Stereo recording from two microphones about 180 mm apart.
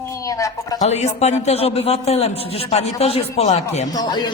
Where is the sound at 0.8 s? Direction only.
35° left (ahead or behind).